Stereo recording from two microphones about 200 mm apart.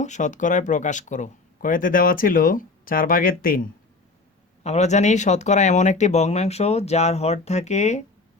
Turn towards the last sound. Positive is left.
turn(degrees=35)  # may be behind; listen again after turning